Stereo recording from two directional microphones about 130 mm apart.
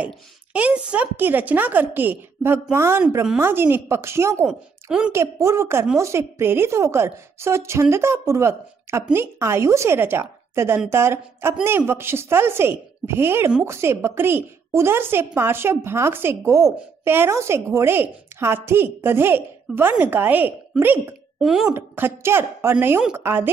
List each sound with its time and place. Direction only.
0.0 s a woman's voice: 10° right (ahead or behind)
21.4 s speech: centre (ahead or behind)
21.6 s a woman's voice: 15° right (ahead or behind)